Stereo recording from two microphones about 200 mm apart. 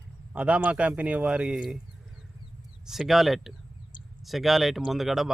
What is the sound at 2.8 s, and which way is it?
A man's voice, centre (ahead or behind).